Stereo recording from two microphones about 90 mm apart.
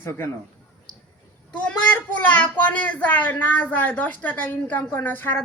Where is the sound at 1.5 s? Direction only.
15° left (ahead or behind).